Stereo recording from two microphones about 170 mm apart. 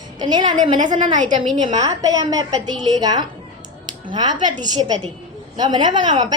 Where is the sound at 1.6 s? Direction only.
20° right (ahead or behind).